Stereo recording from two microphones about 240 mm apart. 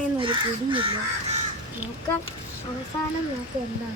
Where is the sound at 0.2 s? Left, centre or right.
Right.